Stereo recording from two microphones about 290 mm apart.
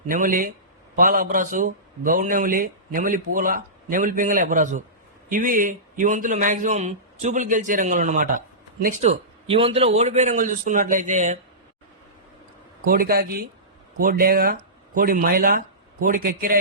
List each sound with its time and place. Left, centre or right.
0.1 s a man's voice: right
12.8 s a man's voice: right